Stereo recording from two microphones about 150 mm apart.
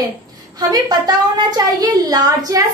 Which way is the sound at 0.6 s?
25° right (ahead or behind).